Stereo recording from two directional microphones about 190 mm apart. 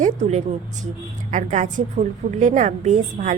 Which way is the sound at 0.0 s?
35° right (ahead or behind).